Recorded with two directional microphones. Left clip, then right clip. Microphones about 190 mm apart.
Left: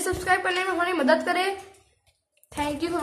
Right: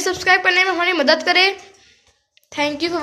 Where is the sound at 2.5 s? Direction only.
15° right (ahead or behind).